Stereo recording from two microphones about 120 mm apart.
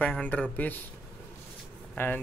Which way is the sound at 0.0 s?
10° left (ahead or behind).